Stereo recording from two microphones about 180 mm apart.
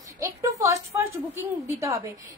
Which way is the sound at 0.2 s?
20° right (ahead or behind).